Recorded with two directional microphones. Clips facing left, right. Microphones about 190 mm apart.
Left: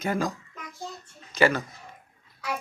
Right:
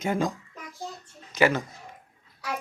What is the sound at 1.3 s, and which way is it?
Speech, 15° right (ahead or behind).